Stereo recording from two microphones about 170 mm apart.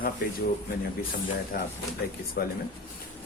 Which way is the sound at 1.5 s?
55° left (ahead or behind).